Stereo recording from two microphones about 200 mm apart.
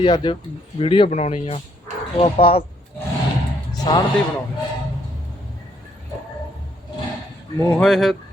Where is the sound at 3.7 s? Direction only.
25° left (ahead or behind).